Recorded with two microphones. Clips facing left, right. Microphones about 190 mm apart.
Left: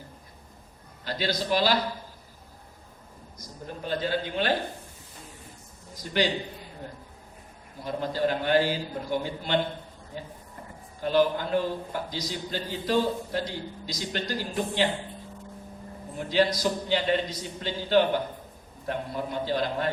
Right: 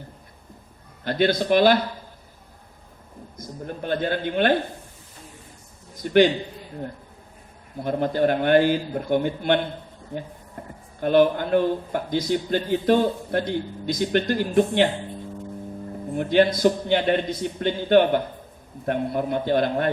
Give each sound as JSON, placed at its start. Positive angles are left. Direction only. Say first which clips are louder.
{"t": 1.0, "sound": "a man's voice", "louder": "right 8 dB", "side_deg": -55}
{"t": 3.3, "sound": "a man's voice", "louder": "right 6 dB", "side_deg": -55}
{"t": 6.0, "sound": "a man's voice", "louder": "right 10 dB", "side_deg": -55}
{"t": 7.9, "sound": "a man's voice", "louder": "right 6 dB", "side_deg": -55}
{"t": 11.0, "sound": "a man's voice", "louder": "right 5 dB", "side_deg": -55}
{"t": 16.1, "sound": "a man's voice", "louder": "right 6 dB", "side_deg": -55}